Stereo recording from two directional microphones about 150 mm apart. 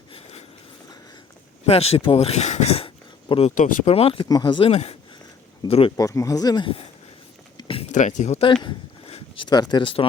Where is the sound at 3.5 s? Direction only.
60° left (ahead or behind).